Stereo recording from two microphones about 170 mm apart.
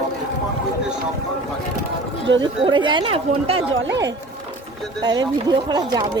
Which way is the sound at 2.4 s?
30° right (ahead or behind).